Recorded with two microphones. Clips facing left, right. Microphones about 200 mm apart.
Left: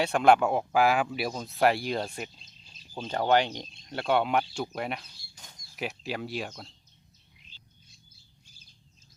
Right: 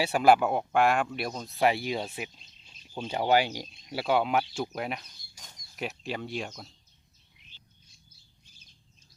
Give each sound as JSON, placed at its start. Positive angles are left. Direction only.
{"t": 0.0, "sound": "speech", "side_deg": -5}
{"t": 5.0, "sound": "speech", "side_deg": 30}
{"t": 5.7, "sound": "speech", "side_deg": 0}